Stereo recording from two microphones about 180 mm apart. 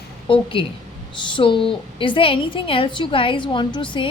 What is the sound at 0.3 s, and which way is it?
A woman's voice, 30° left (ahead or behind).